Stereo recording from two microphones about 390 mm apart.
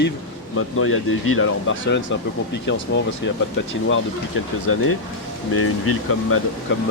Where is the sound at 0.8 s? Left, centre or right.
Left.